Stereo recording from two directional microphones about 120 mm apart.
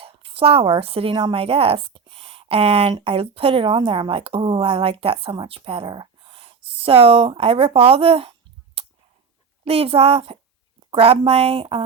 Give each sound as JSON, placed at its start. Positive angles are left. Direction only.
{"t": 0.0, "sound": "a woman's voice", "side_deg": -50}